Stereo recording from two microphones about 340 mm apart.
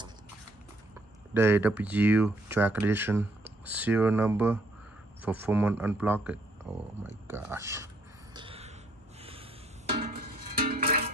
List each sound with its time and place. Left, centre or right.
1.3 s speech: centre
7.2 s a sound: centre
9.2 s snort: centre
9.9 s music: right